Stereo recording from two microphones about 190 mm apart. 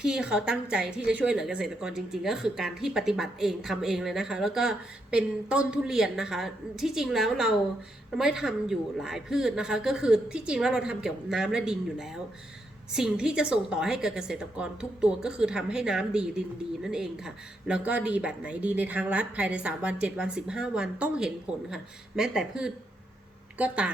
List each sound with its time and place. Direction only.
0.0 s a woman's voice: 5° right (ahead or behind)